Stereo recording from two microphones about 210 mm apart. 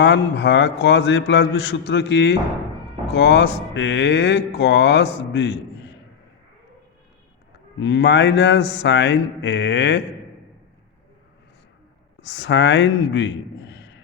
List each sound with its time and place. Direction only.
0.0 s a man's voice: 55° left (ahead or behind)
7.8 s a man's voice: 55° left (ahead or behind)
12.3 s a man's voice: 60° left (ahead or behind)